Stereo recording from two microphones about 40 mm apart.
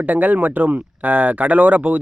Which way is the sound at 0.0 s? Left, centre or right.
Right.